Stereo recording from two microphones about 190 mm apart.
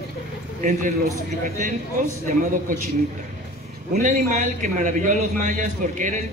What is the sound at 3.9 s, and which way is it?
A man's voice, 40° right (ahead or behind).